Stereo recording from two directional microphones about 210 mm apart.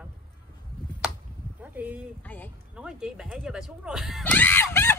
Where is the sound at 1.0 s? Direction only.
5° right (ahead or behind).